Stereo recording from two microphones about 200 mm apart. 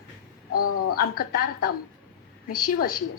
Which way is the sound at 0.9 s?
50° left (ahead or behind).